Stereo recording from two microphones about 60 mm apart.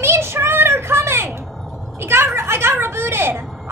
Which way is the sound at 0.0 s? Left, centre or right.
Right.